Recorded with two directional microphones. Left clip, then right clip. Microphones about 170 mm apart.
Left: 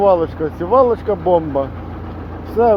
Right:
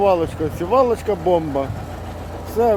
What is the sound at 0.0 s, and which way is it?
Speech, 15° right (ahead or behind).